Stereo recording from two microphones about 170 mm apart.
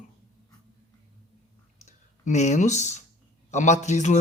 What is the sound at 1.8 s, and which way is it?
A man's voice, 45° left (ahead or behind).